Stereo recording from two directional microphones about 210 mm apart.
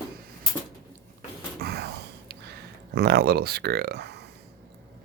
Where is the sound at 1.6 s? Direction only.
50° right (ahead or behind).